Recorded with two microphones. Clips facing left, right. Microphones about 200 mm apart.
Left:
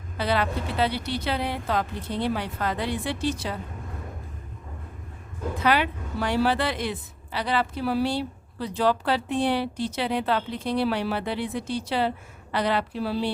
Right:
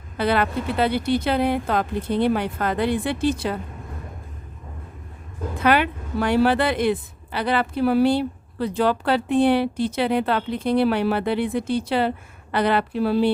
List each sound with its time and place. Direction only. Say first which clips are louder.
0.2 s a woman's voice: right 4 dB; 55° right (ahead or behind)
5.5 s a woman's voice: right 4 dB; 55° right (ahead or behind)